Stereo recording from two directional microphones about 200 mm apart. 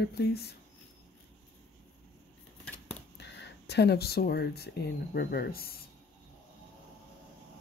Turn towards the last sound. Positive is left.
turn(degrees=50)  # may be behind; listen again after turning